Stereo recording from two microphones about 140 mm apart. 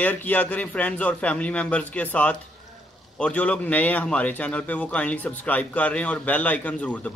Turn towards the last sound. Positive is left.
turn(degrees=10)  # may be behind; listen again after turning